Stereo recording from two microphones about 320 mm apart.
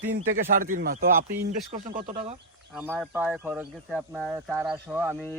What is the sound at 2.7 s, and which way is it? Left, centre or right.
Speech, centre.